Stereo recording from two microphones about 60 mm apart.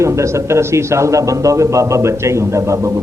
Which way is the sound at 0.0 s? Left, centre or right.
Right.